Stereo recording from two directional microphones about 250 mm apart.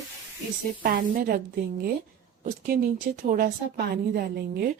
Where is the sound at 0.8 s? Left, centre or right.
Right.